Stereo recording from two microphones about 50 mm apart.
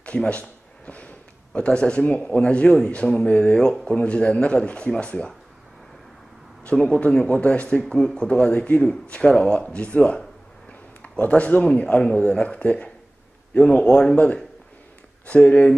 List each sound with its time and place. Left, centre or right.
0.0 s speech: left
6.7 s a man's voice: left